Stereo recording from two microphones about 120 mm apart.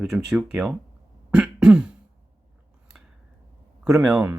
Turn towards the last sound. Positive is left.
turn(degrees=-5)  # may be behind; listen again after turning